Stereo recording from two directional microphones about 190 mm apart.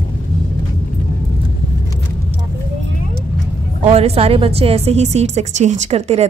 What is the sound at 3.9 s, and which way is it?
A woman's voice, 30° right (ahead or behind).